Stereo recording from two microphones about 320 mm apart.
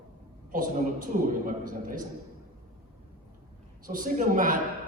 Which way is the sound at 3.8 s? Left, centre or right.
Right.